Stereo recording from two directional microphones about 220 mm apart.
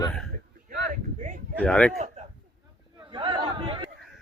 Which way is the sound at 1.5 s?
5° left (ahead or behind).